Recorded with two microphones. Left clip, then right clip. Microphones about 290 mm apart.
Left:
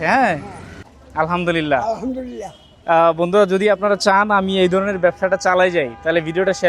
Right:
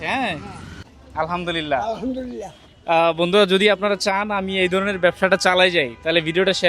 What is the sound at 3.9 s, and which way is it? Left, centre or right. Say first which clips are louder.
Speech: left 7 dB; centre.